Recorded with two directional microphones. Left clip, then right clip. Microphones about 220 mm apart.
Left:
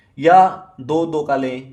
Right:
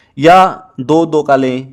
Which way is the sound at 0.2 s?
40° right (ahead or behind).